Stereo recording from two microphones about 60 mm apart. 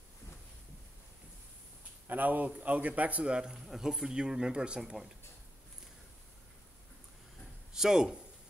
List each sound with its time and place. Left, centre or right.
2.0 s a man's voice: right; by 4.9 s centre
7.7 s speech: centre